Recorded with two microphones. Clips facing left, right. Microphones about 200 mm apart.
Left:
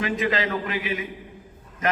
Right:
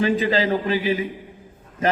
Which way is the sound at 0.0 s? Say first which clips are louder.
Right 5 dB; 30° right (ahead or behind).